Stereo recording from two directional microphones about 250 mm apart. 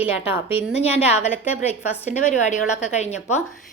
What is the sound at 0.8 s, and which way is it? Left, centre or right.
Speech, left.